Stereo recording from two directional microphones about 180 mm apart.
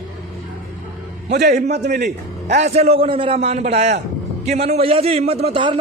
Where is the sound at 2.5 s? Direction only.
40° right (ahead or behind).